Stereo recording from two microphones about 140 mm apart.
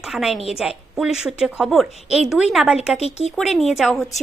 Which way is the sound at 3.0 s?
50° left (ahead or behind).